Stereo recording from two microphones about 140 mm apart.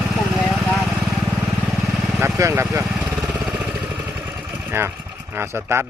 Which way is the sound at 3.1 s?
10° right (ahead or behind).